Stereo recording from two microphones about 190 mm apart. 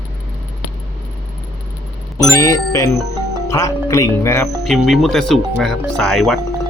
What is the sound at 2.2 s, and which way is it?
Speech, 15° left (ahead or behind).